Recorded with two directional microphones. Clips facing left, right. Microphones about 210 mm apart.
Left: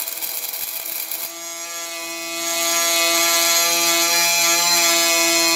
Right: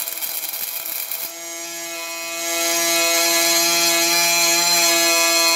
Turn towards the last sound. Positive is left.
turn(degrees=0)  # may be behind; listen again after turning